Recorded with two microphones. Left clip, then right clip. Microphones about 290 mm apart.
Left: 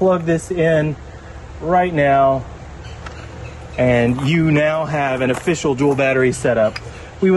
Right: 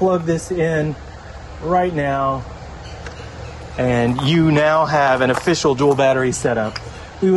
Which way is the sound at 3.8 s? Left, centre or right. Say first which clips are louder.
Left 3 dB; centre.